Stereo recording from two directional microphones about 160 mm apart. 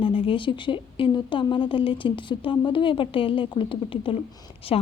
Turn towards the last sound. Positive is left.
turn(degrees=40)  # may be behind; listen again after turning